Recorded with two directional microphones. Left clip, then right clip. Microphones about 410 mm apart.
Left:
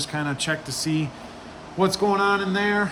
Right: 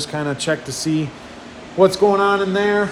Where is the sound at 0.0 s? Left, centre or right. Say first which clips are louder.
Right 4 dB; centre.